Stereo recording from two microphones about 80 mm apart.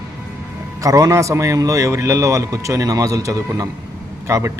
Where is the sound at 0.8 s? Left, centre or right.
Right.